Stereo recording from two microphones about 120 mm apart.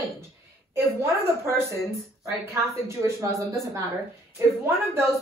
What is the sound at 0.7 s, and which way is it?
Speech, 20° right (ahead or behind).